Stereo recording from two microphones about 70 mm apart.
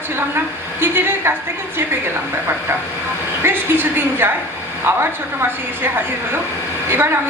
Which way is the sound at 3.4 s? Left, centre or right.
Right.